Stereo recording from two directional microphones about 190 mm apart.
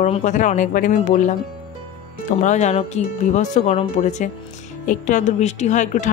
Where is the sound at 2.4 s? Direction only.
40° left (ahead or behind).